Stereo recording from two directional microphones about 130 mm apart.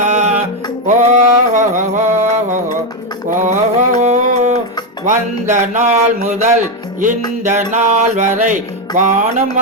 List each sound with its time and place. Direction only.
0.0 s music: 60° right (ahead or behind)
3.2 s mantra: 80° right
3.8 s music: 60° right (ahead or behind)